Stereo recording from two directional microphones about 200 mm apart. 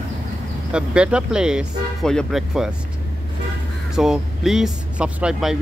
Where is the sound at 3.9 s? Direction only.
Centre (ahead or behind).